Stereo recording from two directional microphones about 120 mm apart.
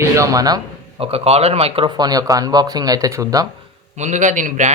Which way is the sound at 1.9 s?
35° right (ahead or behind).